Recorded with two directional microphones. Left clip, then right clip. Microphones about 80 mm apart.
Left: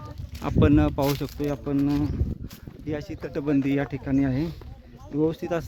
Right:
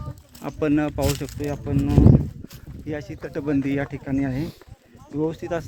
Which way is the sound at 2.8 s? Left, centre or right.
Centre.